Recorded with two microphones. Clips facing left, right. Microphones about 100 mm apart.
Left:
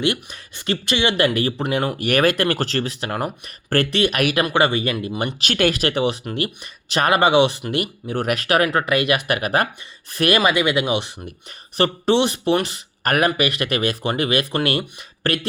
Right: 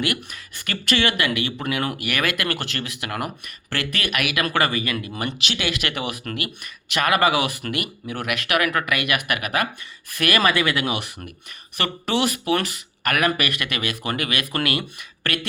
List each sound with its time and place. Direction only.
0.0 s speech: 25° left (ahead or behind)
1.1 s speech: 35° left (ahead or behind)
4.4 s speech: 20° left (ahead or behind)
5.4 s speech: 45° left (ahead or behind); by 10.4 s 30° left (ahead or behind)
10.4 s speech: 20° left (ahead or behind)